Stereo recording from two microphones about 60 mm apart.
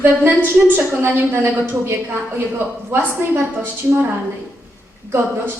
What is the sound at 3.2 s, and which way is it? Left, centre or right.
Speech, right.